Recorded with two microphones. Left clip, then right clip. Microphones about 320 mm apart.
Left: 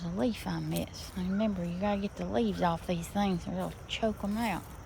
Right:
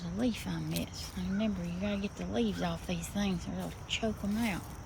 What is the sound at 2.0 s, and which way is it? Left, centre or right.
Speech, left.